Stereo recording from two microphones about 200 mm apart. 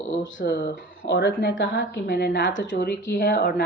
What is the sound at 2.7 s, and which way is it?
Speech, 50° left (ahead or behind).